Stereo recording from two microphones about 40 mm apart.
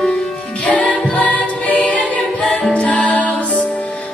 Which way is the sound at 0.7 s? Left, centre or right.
Left.